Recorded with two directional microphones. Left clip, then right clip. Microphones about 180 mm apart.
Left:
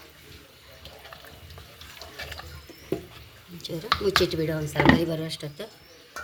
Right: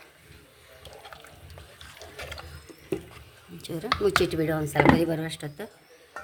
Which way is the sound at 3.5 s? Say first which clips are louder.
Left 2 dB; 50° right (ahead or behind).